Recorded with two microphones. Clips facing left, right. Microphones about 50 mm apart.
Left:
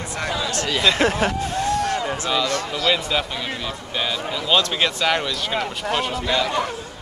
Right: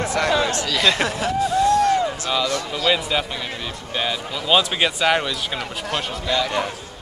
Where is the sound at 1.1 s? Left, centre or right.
Left.